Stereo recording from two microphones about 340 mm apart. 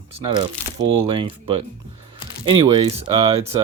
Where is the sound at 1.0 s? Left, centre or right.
Centre.